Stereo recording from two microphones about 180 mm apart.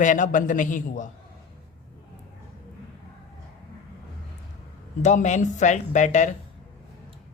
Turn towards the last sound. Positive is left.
turn(degrees=40)  # may be behind; listen again after turning